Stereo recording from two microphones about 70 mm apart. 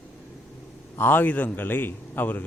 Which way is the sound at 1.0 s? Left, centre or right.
Left.